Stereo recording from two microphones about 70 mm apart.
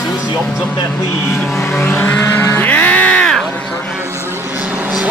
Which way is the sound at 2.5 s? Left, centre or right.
Left.